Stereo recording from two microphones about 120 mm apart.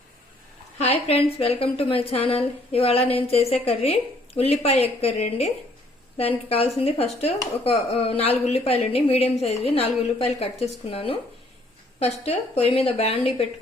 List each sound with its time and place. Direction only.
0.8 s a woman's voice: 55° left (ahead or behind)
6.1 s a woman's voice: 55° left (ahead or behind)